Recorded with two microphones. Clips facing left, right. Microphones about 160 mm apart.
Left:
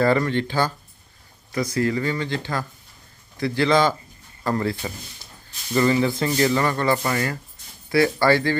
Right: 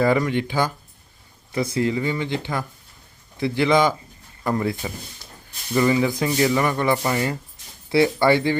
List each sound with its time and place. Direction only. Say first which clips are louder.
0.2 s speech: even; 10° right (ahead or behind)
1.5 s speech: even; 25° right (ahead or behind)
4.8 s speech: right 1 dB; 10° right (ahead or behind)